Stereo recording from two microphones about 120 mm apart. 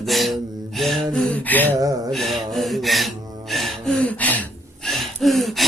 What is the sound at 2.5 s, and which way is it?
Gasp, centre (ahead or behind).